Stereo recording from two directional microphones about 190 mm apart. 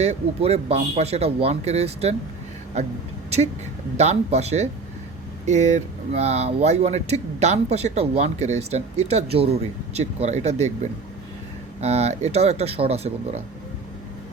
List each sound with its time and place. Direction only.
0.0 s speech: 35° right (ahead or behind)
3.2 s speech: 35° right (ahead or behind)